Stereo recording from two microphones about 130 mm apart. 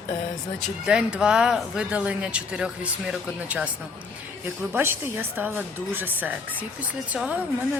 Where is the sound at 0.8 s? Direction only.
5° right (ahead or behind).